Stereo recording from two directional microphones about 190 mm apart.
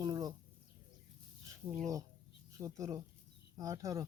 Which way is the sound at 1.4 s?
15° right (ahead or behind).